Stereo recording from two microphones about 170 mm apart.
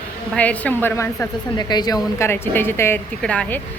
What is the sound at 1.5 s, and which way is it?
Speech, 25° left (ahead or behind).